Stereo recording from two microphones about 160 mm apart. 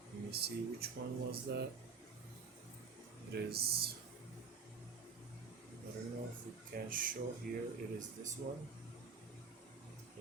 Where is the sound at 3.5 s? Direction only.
75° right (ahead or behind).